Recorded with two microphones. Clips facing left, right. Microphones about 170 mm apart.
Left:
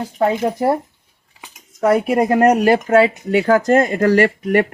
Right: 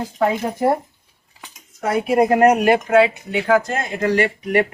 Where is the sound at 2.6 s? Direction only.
40° left (ahead or behind).